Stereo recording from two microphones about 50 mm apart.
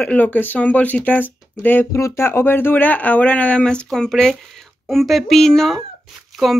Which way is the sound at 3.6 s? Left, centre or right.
Centre.